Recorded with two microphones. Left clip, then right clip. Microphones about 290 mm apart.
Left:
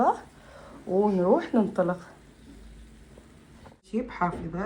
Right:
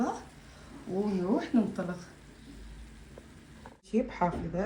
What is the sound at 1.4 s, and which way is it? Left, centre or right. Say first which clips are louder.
Speech: left 5 dB; centre.